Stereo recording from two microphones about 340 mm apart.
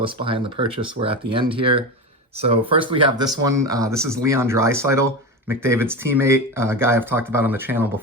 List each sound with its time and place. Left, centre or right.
0.0 s speech: centre